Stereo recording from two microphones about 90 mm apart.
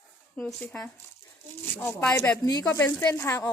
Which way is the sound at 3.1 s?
35° left (ahead or behind).